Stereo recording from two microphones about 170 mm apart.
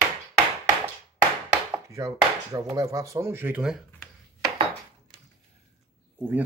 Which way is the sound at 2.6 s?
20° right (ahead or behind).